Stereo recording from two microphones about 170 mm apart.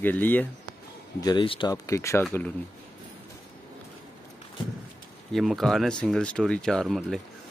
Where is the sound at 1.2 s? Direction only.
30° left (ahead or behind).